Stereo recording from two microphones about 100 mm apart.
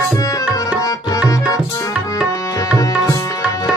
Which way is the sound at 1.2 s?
35° left (ahead or behind).